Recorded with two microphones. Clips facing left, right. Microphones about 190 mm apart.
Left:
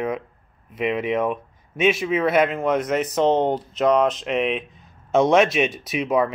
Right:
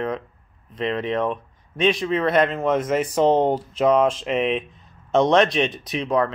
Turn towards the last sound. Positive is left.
turn(degrees=10)  # may be behind; listen again after turning